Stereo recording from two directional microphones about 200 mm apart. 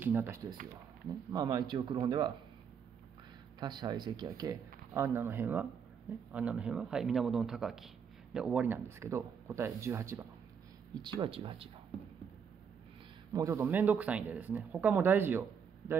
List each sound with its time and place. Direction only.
0.0 s speech: 10° right (ahead or behind)
1.3 s speech: 20° right (ahead or behind)
3.5 s speech: 20° right (ahead or behind)
11.0 s speech: 25° right (ahead or behind)
13.3 s speech: 15° right (ahead or behind)